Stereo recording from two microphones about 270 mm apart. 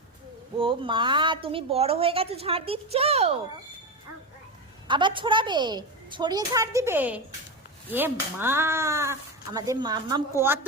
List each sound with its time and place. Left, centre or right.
0.6 s a woman's voice: centre
4.9 s a child's voice: centre